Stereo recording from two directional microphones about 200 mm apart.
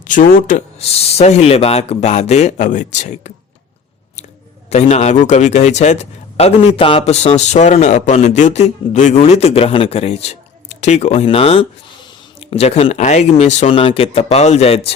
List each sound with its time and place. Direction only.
0.1 s a man's voice: 45° left (ahead or behind)
4.7 s a man's voice: 35° left (ahead or behind)